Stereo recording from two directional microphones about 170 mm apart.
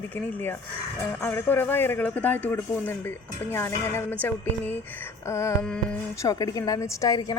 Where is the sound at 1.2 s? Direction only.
10° left (ahead or behind).